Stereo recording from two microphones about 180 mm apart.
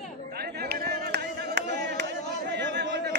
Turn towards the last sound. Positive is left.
turn(degrees=-70)  # may be behind; listen again after turning